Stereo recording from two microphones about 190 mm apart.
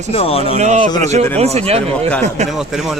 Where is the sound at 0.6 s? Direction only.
40° right (ahead or behind).